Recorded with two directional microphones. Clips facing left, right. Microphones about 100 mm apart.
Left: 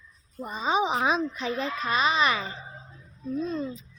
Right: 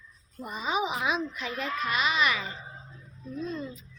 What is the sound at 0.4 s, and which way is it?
A woman's voice, 30° left (ahead or behind).